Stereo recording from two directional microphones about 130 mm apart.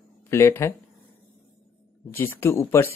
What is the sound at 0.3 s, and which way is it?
Speech, 20° left (ahead or behind).